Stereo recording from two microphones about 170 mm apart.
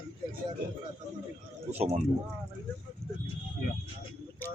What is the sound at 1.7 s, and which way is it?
Speech, 40° right (ahead or behind).